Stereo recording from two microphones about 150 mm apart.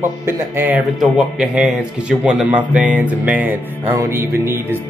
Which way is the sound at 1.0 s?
5° right (ahead or behind).